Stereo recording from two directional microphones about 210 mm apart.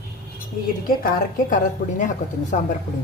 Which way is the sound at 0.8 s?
45° left (ahead or behind).